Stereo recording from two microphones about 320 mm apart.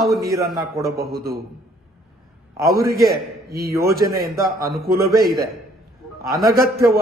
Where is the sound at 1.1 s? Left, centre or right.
Right.